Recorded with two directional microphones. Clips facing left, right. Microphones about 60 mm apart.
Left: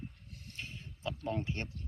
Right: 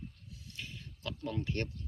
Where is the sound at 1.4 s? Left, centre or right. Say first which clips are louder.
Right 3 dB; centre.